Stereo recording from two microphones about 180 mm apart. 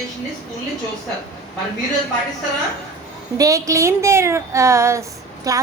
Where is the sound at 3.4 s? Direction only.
15° right (ahead or behind).